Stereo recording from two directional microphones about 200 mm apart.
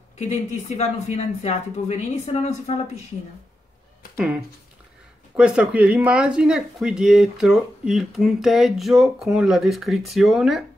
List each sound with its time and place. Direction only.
0.7 s a woman's voice: 35° left (ahead or behind)
5.3 s speech: 5° right (ahead or behind)